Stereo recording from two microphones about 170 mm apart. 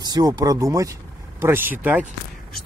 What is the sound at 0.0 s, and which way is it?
Speech, 20° right (ahead or behind).